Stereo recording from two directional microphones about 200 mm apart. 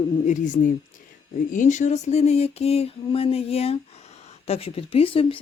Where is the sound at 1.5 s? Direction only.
40° left (ahead or behind).